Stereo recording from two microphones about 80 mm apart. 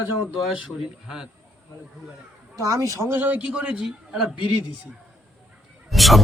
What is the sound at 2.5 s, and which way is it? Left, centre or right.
Speech, right.